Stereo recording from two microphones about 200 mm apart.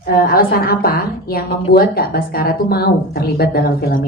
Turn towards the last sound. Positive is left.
turn(degrees=50)  # may be behind; listen again after turning